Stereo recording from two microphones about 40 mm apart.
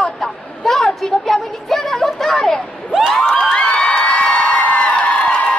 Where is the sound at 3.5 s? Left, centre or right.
Left.